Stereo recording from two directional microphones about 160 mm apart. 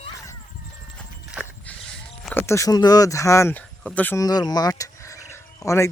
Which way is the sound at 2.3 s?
15° left (ahead or behind).